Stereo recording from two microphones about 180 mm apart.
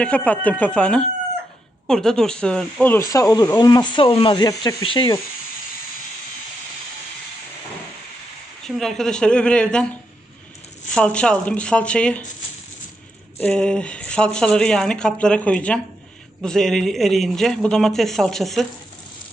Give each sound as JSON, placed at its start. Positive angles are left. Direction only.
{"t": 0.0, "sound": "speech", "side_deg": 5}
{"t": 8.6, "sound": "speech", "side_deg": 0}
{"t": 10.9, "sound": "speech", "side_deg": 5}
{"t": 13.4, "sound": "speech", "side_deg": 5}